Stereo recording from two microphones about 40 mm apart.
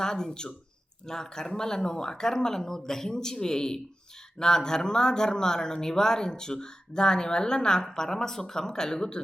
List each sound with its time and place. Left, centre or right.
0.0 s speech: centre